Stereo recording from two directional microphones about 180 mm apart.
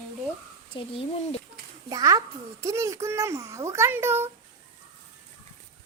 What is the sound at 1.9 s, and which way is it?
A child's voice, 20° right (ahead or behind).